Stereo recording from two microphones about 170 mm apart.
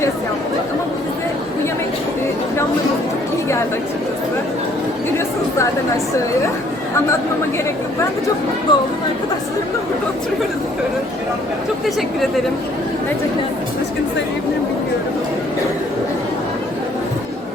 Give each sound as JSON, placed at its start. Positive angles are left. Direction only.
{"t": 8.7, "sound": "speech", "side_deg": 25}